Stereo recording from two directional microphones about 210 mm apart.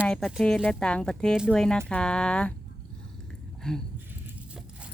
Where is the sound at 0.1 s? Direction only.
Centre (ahead or behind).